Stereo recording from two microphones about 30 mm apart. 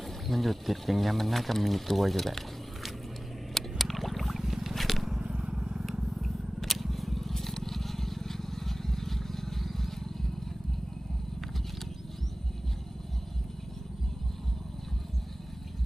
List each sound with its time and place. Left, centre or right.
0.3 s speech: centre
3.5 s rowboat: centre
4.4 s a sound: centre
4.7 s biting: centre
5.2 s a sound: right
6.2 s purr: centre
7.3 s vehicle: centre